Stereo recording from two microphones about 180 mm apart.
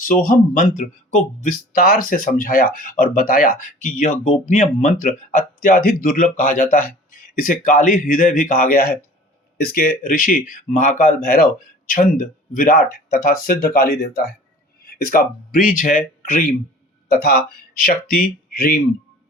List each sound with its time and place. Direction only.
0.0 s speech: 50° left (ahead or behind)
17.1 s speech: 60° left (ahead or behind)